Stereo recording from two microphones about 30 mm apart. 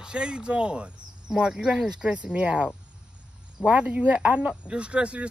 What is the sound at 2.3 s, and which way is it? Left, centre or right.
Speech, right.